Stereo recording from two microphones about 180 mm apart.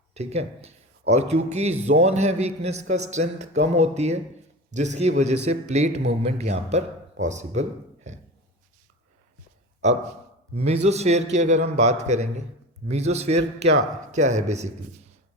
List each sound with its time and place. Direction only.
0.1 s a man's voice: 35° right (ahead or behind)
9.8 s a man's voice: 40° right (ahead or behind)